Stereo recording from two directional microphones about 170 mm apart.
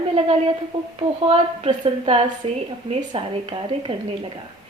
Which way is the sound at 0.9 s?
35° right (ahead or behind).